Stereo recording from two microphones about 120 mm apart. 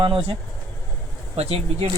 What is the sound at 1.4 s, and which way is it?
Speech, 60° right (ahead or behind).